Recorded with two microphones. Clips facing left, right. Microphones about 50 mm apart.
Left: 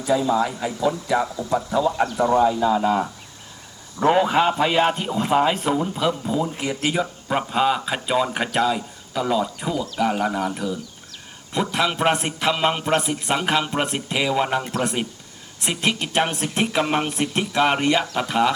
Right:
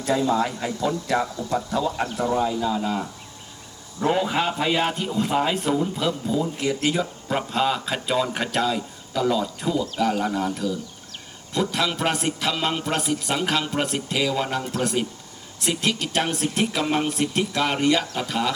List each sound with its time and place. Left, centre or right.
0.0 s a man's voice: centre; by 4.4 s left
4.4 s a man's voice: centre
14.6 s a man's voice: left